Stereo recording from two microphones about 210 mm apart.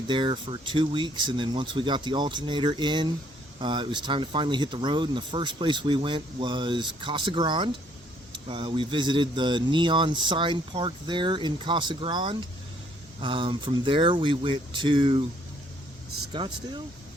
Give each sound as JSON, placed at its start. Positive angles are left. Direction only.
{"t": 0.1, "sound": "speech", "side_deg": -25}
{"t": 16.3, "sound": "speech", "side_deg": -20}